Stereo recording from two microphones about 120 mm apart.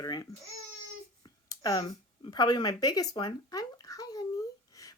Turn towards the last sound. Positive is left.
turn(degrees=30)  # may be behind; listen again after turning